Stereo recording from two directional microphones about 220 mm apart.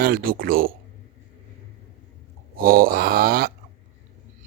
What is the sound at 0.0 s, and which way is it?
Speech, 40° right (ahead or behind).